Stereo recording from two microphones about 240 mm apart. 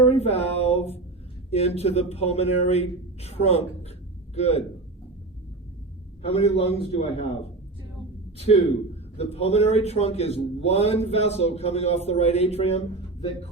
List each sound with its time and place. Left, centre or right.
0.0 s a man's voice: left
6.2 s a man's voice: left
9.1 s a man's voice: left